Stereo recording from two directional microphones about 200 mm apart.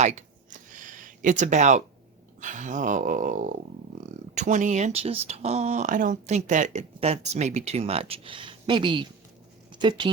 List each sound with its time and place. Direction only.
0.0 s speech: 35° right (ahead or behind)
0.7 s a sound: 40° right (ahead or behind)
2.4 s speech: 40° right (ahead or behind); by 10.1 s 20° right (ahead or behind)